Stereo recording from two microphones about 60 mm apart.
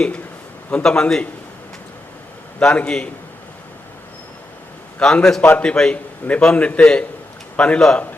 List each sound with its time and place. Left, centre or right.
0.7 s a man's voice: centre
2.6 s a man's voice: left
4.9 s a man's voice: centre
5.4 s a man's voice: left
5.7 s a man's voice: centre